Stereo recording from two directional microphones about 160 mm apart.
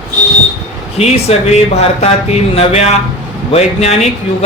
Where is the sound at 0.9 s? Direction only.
40° left (ahead or behind).